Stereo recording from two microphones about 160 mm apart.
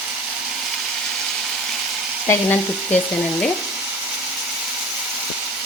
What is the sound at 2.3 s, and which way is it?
Frying, 10° left (ahead or behind).